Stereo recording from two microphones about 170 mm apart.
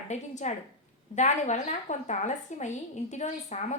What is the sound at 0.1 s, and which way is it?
A woman's voice, 45° left (ahead or behind).